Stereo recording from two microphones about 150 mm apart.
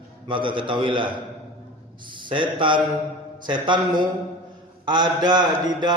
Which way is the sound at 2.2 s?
35° right (ahead or behind).